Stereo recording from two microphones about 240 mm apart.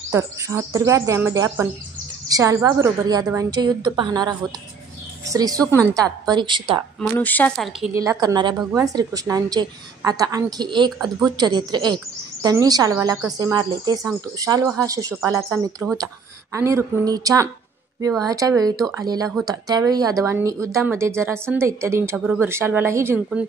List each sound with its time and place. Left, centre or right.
0.1 s speech: centre
7.0 s speech: centre
7.9 s speech: centre